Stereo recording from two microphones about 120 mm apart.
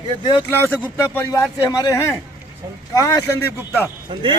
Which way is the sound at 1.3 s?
30° left (ahead or behind).